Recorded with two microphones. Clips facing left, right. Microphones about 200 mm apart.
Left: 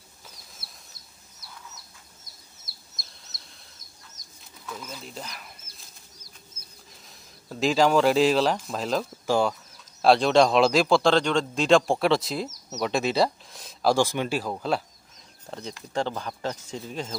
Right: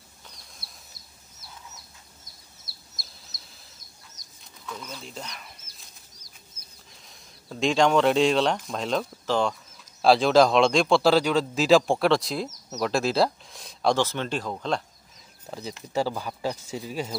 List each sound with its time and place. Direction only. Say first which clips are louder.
0.6 s chicken: even; centre (ahead or behind)
2.7 s chicken: even; 20° left (ahead or behind)
3.0 s chicken: even; centre (ahead or behind)
4.6 s speech: even; 5° left (ahead or behind)
7.4 s a man's voice: even; centre (ahead or behind)
13.9 s speech: left 2 dB; 10° left (ahead or behind); by 17.2 s 5° right (ahead or behind)